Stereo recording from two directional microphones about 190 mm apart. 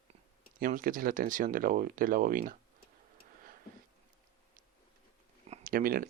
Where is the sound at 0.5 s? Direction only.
45° right (ahead or behind).